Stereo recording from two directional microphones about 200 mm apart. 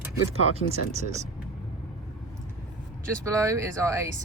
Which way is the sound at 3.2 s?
15° right (ahead or behind).